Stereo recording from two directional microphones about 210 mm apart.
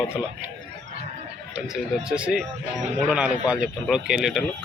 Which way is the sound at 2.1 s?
5° right (ahead or behind).